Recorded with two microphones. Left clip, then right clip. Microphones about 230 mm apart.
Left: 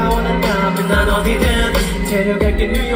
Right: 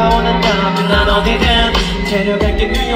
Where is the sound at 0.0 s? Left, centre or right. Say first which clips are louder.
Right 5 dB; centre.